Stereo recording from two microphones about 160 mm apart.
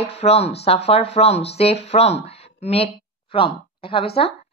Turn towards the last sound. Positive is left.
turn(degrees=35)  # may be behind; listen again after turning